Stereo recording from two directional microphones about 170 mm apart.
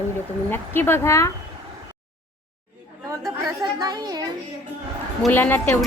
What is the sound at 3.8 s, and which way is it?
Speech, 25° right (ahead or behind).